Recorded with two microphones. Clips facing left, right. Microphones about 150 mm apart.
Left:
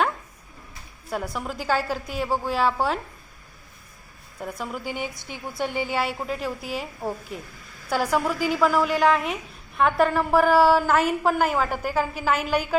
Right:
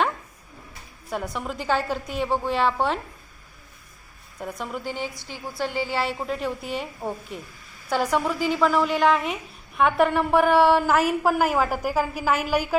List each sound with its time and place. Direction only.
1.1 s a woman's voice: 5° left (ahead or behind)
4.4 s a woman's voice: 5° left (ahead or behind)
6.1 s a woman's voice: centre (ahead or behind)
10.8 s a woman's voice: 10° right (ahead or behind)